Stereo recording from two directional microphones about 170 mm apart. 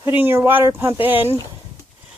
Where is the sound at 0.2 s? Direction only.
15° right (ahead or behind).